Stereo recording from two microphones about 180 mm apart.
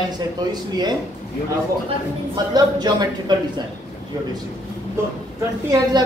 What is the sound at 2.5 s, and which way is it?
Speech, 20° right (ahead or behind).